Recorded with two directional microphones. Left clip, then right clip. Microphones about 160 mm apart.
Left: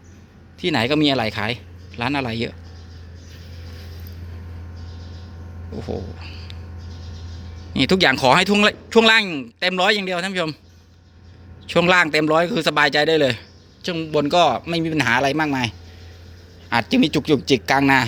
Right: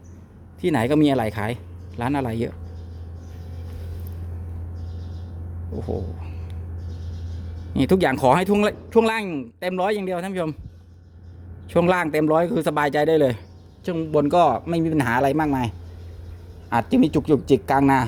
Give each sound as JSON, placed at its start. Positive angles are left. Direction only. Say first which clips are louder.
{"t": 0.6, "sound": "speech", "louder": "left 1 dB", "side_deg": -20}
{"t": 5.7, "sound": "speech", "louder": "even", "side_deg": 0}
{"t": 6.1, "sound": "speech", "louder": "left 5 dB", "side_deg": -15}
{"t": 7.7, "sound": "speech", "louder": "left 3 dB", "side_deg": -15}
{"t": 8.9, "sound": "speech", "louder": "left 4 dB", "side_deg": 0}
{"t": 9.1, "sound": "speech", "louder": "left 9 dB", "side_deg": -15}
{"t": 11.7, "sound": "speech", "louder": "left 4 dB", "side_deg": -15}
{"t": 16.6, "sound": "speech", "louder": "left 1 dB", "side_deg": -15}